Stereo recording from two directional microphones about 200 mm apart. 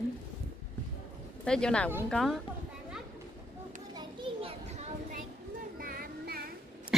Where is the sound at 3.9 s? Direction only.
25° right (ahead or behind).